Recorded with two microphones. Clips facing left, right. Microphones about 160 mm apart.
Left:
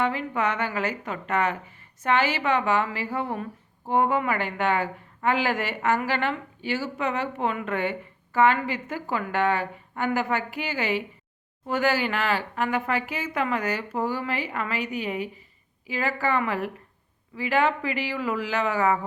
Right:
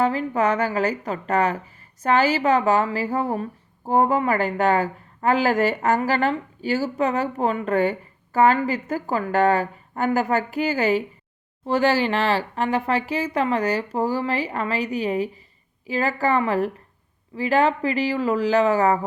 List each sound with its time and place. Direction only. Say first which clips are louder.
0.0 s a woman's voice: right 5 dB; 40° right (ahead or behind)